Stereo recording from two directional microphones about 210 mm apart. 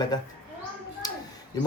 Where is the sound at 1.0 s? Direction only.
20° left (ahead or behind).